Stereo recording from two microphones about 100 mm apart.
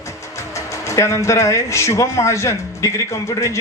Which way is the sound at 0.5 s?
30° left (ahead or behind).